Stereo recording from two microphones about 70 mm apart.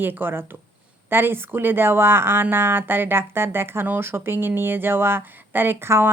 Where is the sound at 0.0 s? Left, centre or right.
Right.